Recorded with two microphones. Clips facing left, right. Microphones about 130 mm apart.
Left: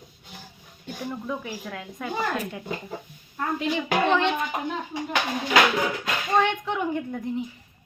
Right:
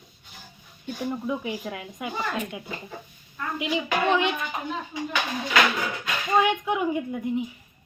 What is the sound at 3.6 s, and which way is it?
Speech, 10° right (ahead or behind).